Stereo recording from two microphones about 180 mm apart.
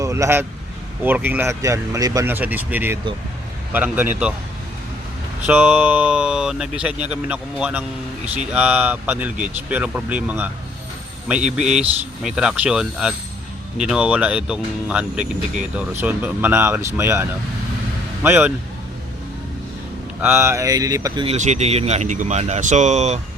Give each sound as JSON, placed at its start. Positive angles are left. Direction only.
{"t": 0.0, "sound": "a sound", "side_deg": -15}
{"t": 1.0, "sound": "speech", "side_deg": -10}
{"t": 5.5, "sound": "speech", "side_deg": -10}
{"t": 20.2, "sound": "speech", "side_deg": -15}
{"t": 21.2, "sound": "speech", "side_deg": -40}